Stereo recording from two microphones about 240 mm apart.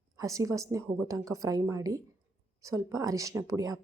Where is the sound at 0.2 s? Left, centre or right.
Centre.